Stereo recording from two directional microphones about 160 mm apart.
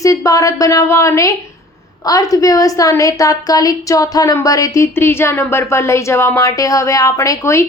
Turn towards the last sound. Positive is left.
turn(degrees=20)  # may be behind; listen again after turning